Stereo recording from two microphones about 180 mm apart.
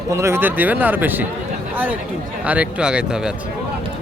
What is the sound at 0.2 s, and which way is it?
A man's voice, 15° right (ahead or behind).